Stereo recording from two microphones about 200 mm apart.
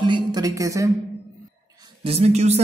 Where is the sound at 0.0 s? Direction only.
20° right (ahead or behind).